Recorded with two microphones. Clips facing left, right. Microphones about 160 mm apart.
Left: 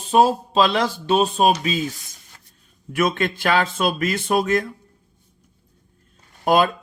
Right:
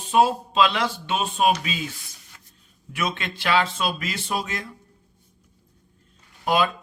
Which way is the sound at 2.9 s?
50° left (ahead or behind).